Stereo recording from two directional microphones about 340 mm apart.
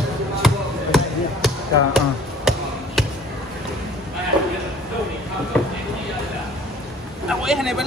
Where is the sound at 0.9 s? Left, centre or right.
Centre.